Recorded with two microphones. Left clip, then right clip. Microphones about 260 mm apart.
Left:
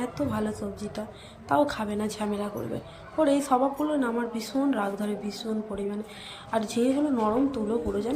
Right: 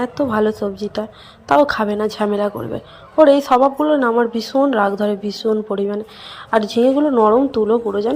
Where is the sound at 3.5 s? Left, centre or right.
Right.